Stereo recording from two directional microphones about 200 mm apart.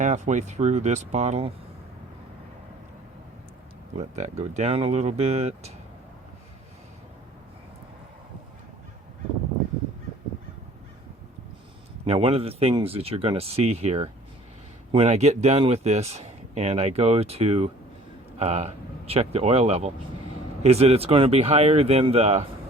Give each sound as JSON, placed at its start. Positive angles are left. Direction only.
{"t": 0.0, "sound": "speech", "side_deg": -35}
{"t": 3.9, "sound": "speech", "side_deg": -35}
{"t": 12.0, "sound": "speech", "side_deg": -30}